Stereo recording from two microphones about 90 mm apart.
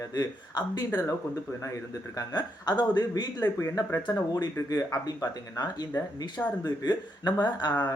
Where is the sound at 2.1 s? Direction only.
50° left (ahead or behind).